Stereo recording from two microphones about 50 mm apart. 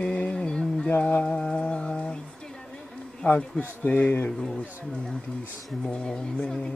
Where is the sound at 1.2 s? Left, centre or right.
Centre.